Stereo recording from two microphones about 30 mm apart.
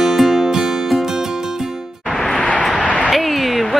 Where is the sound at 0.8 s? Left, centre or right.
Centre.